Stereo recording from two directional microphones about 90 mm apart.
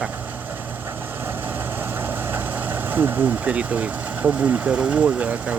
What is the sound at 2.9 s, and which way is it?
Speech, 20° right (ahead or behind).